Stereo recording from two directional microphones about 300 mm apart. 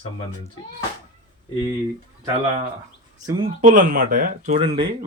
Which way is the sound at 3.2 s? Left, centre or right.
Centre.